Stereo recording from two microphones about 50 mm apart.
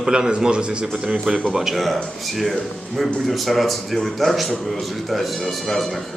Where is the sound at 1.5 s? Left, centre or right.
Centre.